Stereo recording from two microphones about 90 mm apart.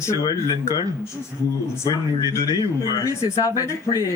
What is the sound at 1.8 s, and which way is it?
Speech, 40° left (ahead or behind).